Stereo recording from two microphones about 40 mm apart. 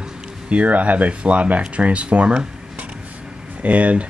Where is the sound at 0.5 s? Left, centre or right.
Right.